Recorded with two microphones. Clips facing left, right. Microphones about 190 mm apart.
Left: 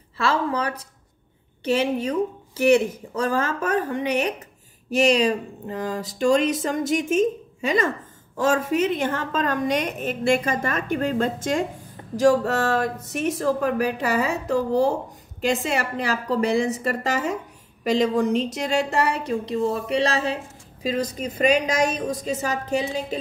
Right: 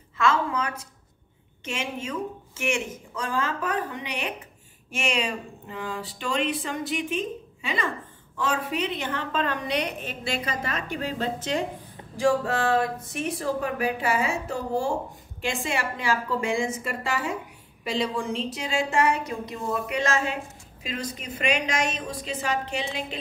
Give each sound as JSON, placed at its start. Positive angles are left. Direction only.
{"t": 0.2, "sound": "a woman's voice", "side_deg": 35}